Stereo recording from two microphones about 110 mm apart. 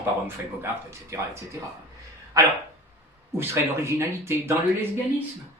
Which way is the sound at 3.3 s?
20° right (ahead or behind).